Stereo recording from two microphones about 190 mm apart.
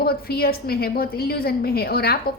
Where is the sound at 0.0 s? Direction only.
55° left (ahead or behind).